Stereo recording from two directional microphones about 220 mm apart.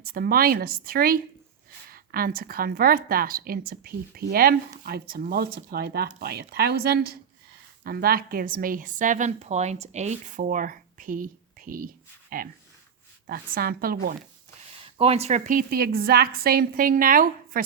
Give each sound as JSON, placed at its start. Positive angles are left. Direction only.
{"t": 0.0, "sound": "a woman's voice", "side_deg": -45}
{"t": 14.9, "sound": "a woman's voice", "side_deg": -25}